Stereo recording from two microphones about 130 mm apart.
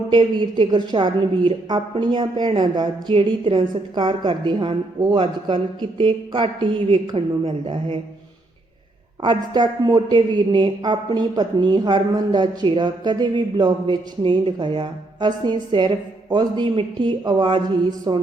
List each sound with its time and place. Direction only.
0.1 s speech: 35° right (ahead or behind)
9.2 s speech: 35° right (ahead or behind)